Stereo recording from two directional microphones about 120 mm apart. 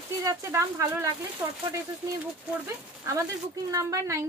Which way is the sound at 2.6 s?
25° right (ahead or behind).